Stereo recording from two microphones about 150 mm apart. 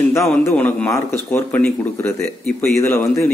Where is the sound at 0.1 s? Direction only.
15° left (ahead or behind).